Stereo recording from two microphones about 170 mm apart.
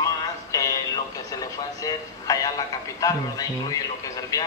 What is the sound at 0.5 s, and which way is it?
Speech, 20° left (ahead or behind).